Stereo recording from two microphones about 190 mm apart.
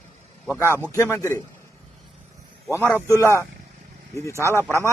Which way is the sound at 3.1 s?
15° left (ahead or behind).